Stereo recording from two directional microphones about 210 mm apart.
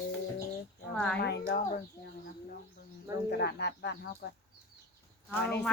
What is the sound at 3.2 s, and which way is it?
Speech, 50° left (ahead or behind).